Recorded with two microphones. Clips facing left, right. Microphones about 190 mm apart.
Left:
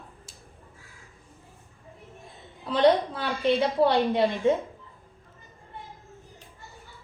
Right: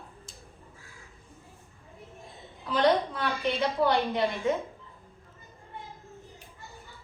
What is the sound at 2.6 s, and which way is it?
A woman's voice, 30° left (ahead or behind).